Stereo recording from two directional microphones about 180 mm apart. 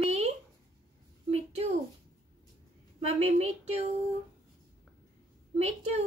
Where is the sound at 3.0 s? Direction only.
35° right (ahead or behind).